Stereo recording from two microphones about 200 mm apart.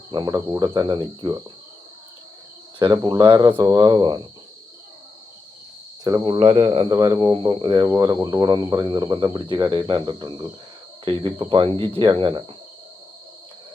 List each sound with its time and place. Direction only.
0.1 s speech: 20° right (ahead or behind)
2.7 s speech: 25° right (ahead or behind)
6.1 s speech: 20° right (ahead or behind)